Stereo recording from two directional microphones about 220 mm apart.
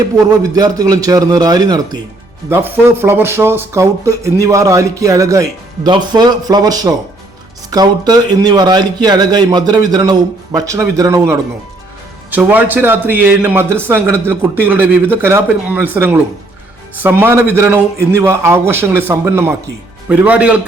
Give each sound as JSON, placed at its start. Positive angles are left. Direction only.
{"t": 0.5, "sound": "speech", "side_deg": -15}